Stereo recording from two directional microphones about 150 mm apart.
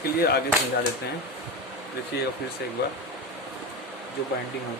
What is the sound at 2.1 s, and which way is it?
Speech, 90° left.